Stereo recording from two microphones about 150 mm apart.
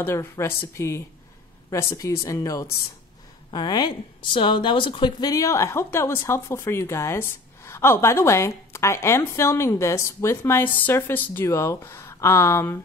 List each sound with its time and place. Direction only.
0.0 s speech: 20° left (ahead or behind)